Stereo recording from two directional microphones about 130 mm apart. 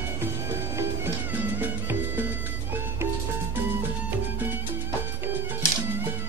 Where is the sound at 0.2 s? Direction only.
20° right (ahead or behind).